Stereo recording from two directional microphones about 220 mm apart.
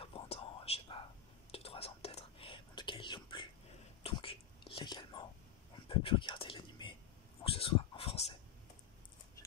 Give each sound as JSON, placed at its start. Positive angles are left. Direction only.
{"t": 0.0, "sound": "whispering", "side_deg": 25}